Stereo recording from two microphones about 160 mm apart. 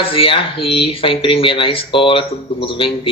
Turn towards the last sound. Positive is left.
turn(degrees=35)  # may be behind; listen again after turning